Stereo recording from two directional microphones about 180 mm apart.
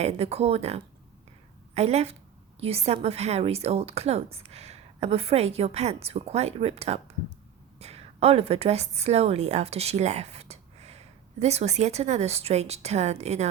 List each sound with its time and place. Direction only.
0.0 s a woman's voice: 35° right (ahead or behind)